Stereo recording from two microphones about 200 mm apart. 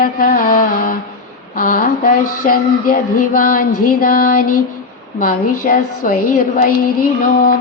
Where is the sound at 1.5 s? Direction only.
45° left (ahead or behind).